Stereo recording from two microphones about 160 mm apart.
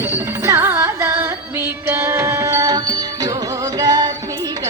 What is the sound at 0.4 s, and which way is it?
Music, 15° right (ahead or behind).